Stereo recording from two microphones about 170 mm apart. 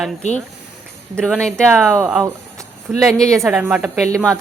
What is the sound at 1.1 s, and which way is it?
Speech, 5° left (ahead or behind).